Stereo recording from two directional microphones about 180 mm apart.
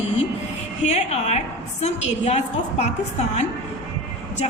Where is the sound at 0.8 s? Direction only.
40° left (ahead or behind).